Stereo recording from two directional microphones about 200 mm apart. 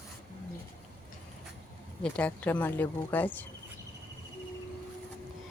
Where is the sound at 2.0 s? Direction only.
5° left (ahead or behind).